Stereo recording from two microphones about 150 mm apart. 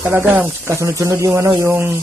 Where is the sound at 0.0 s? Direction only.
15° right (ahead or behind).